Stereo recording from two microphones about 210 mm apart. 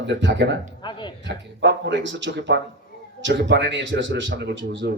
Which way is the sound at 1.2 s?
55° right (ahead or behind).